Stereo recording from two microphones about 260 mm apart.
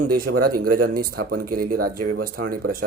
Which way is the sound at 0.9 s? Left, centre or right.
Right.